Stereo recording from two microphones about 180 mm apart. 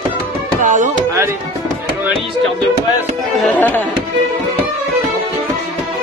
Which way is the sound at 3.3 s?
5° left (ahead or behind).